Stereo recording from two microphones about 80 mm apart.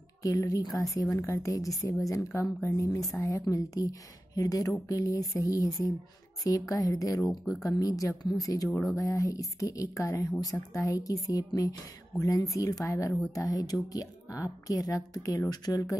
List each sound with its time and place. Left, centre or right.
0.2 s a woman's voice: left